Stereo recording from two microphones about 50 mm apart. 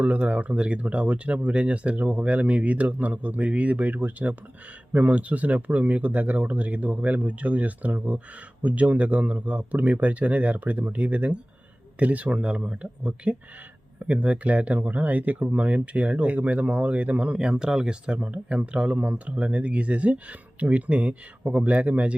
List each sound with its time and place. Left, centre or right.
0.0 s speech: right